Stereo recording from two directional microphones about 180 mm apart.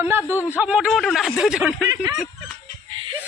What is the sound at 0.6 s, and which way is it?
A man's voice, 5° right (ahead or behind).